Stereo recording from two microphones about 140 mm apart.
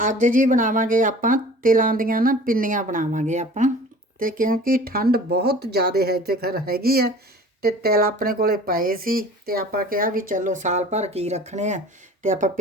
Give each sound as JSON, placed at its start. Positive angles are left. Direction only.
{"t": 0.0, "sound": "speech", "side_deg": -70}
{"t": 4.2, "sound": "speech", "side_deg": -75}